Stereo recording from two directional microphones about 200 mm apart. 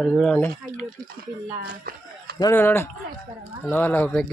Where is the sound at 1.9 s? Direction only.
45° right (ahead or behind).